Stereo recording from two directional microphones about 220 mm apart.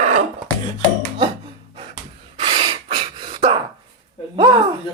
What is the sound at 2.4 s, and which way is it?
Gasp, 20° right (ahead or behind).